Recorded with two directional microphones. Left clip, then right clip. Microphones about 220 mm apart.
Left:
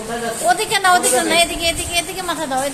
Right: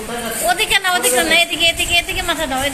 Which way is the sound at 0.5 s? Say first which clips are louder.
Left 1 dB; 20° left (ahead or behind).